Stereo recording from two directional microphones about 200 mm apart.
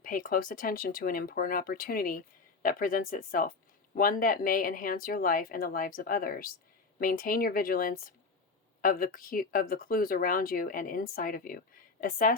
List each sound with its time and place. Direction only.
0.0 s a woman's voice: 45° left (ahead or behind)